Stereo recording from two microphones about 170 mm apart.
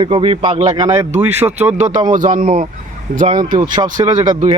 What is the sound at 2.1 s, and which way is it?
Speech, 50° right (ahead or behind).